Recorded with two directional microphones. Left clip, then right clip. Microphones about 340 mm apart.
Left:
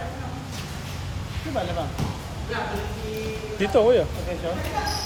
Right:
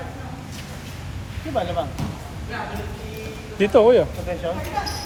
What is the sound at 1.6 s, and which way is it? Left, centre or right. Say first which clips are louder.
Speech: right 4 dB; right.